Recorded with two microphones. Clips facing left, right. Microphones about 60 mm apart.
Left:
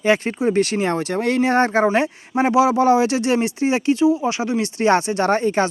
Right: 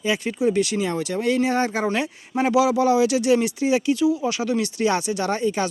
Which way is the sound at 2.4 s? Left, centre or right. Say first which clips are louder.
Left 3 dB; left.